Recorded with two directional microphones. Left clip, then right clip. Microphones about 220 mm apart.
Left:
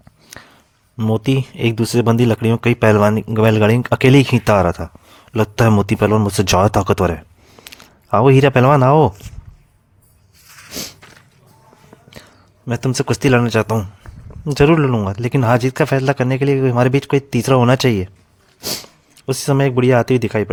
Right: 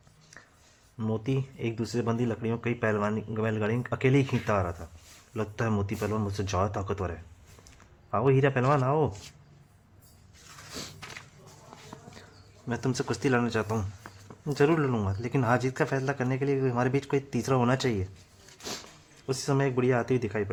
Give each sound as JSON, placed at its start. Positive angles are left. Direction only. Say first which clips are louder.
{"t": 0.9, "sound": "speech", "louder": "left 13 dB", "side_deg": 45}
{"t": 10.7, "sound": "walk", "louder": "left 12 dB", "side_deg": 30}
{"t": 12.6, "sound": "speech", "louder": "left 11 dB", "side_deg": 40}